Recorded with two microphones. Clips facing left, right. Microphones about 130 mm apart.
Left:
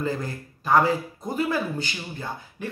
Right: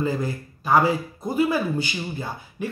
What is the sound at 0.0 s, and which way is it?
Speech, 5° right (ahead or behind).